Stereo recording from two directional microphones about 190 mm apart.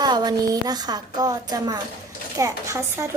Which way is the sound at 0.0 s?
20° right (ahead or behind).